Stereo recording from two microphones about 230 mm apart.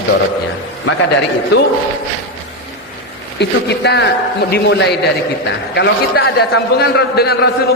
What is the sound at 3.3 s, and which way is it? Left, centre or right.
A man's voice, left.